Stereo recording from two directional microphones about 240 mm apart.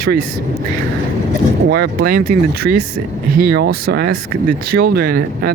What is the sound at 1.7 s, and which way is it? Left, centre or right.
Speech, right.